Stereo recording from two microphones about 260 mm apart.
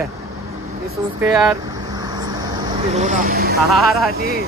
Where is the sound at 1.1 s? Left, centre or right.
Centre.